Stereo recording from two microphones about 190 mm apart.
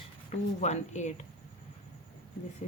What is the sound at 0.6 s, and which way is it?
Speech, 40° left (ahead or behind).